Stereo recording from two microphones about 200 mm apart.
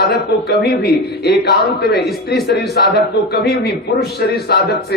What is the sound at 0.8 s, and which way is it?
A man's voice, 55° left (ahead or behind).